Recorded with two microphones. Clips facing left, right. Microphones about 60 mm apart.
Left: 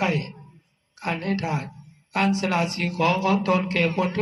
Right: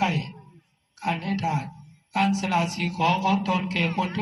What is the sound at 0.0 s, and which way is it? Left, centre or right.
A man's voice, left.